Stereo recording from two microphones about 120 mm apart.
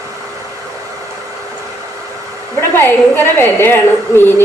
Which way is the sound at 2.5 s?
20° left (ahead or behind).